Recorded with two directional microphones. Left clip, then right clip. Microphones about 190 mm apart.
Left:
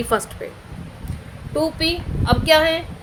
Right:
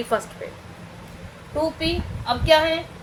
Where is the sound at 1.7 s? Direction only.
60° left (ahead or behind).